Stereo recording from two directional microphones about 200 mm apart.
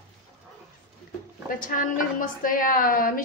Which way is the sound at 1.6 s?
45° left (ahead or behind).